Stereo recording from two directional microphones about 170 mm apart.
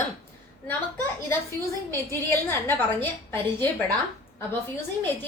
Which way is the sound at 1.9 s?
15° left (ahead or behind).